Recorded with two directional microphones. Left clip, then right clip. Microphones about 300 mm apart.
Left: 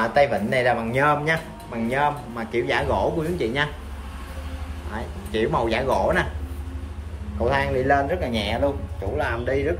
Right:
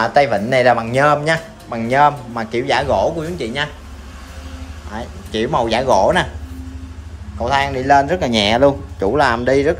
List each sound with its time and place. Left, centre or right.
0.0 s a man's voice: centre
4.9 s a man's voice: centre
7.3 s a man's voice: centre